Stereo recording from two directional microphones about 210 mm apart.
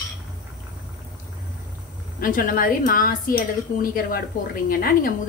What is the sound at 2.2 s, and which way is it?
A woman's voice, 40° left (ahead or behind).